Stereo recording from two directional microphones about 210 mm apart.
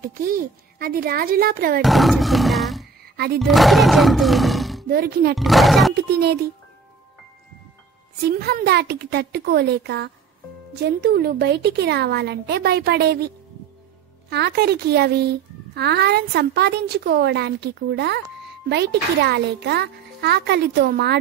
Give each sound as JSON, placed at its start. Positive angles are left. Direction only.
{"t": 0.0, "sound": "a child's voice", "side_deg": -45}
{"t": 1.8, "sound": "speech", "side_deg": 0}
{"t": 4.8, "sound": "a child's voice", "side_deg": -45}
{"t": 5.3, "sound": "speech", "side_deg": 0}
{"t": 6.0, "sound": "a child's voice", "side_deg": -50}
{"t": 8.2, "sound": "a child's voice", "side_deg": -50}
{"t": 14.3, "sound": "a child's voice", "side_deg": -50}